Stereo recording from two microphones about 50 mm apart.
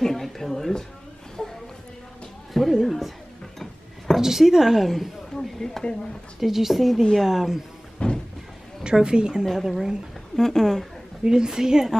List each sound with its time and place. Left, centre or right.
0.0 s a sound: centre
2.8 s a woman's voice: centre
4.2 s a woman's voice: centre
5.4 s a sound: centre
6.4 s a woman's voice: centre
8.0 s a sound: left
8.8 s a woman's voice: centre
9.5 s a woman's voice: centre
11.2 s a woman's voice: centre